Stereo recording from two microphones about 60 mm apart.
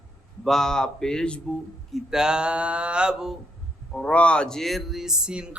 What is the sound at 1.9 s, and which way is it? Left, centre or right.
Speech, centre.